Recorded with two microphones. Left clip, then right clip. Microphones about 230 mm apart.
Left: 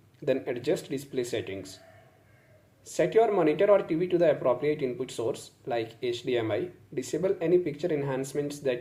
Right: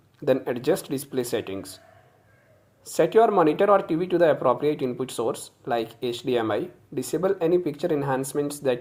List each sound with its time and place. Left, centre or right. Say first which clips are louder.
0.3 s speech: right 5 dB; right
2.8 s speech: right 5 dB; right